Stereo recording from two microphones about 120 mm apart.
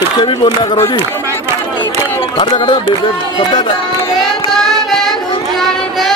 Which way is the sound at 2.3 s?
40° left (ahead or behind).